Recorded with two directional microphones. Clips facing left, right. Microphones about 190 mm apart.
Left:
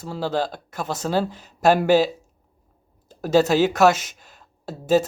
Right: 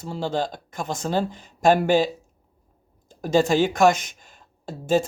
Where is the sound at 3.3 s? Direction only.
5° left (ahead or behind).